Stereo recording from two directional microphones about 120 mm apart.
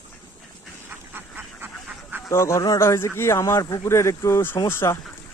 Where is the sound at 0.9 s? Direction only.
20° right (ahead or behind).